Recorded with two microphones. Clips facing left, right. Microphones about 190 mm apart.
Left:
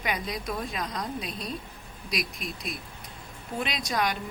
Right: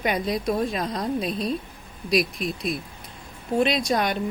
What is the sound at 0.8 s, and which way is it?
Speech, 35° right (ahead or behind).